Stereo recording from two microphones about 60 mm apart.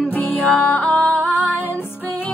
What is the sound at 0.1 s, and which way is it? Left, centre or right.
Music, left.